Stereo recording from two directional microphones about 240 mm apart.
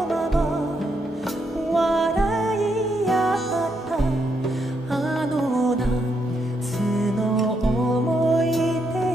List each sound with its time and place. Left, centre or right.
0.1 s music: centre
1.7 s music: centre
6.8 s music: centre